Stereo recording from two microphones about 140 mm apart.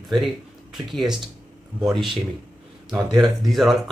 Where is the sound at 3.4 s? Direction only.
Centre (ahead or behind).